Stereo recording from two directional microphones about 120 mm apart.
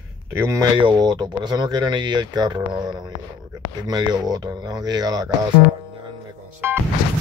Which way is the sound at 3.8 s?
35° right (ahead or behind).